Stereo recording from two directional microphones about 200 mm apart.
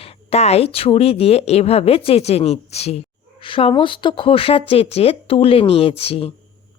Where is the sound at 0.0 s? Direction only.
30° left (ahead or behind).